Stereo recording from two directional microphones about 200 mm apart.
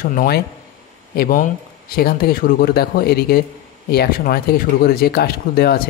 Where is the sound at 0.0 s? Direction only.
45° left (ahead or behind).